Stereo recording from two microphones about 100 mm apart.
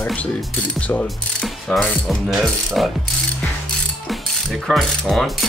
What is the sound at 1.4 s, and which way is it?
Mechanisms, centre (ahead or behind).